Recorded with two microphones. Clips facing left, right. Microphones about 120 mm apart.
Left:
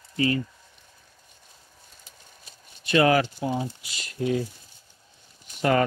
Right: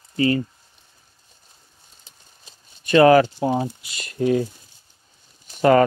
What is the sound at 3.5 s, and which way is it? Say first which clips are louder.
Speech: right 6 dB; 55° right (ahead or behind).